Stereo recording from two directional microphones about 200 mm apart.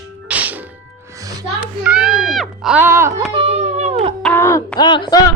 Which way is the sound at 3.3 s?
30° right (ahead or behind).